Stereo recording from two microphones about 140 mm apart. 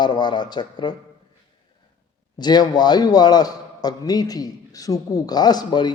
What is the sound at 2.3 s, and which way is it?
A man's voice, 30° left (ahead or behind).